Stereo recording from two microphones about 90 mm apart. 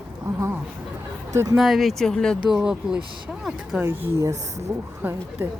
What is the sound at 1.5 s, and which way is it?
Speech, centre (ahead or behind).